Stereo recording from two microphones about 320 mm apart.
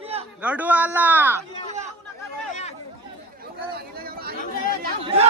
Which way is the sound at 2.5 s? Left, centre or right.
Left.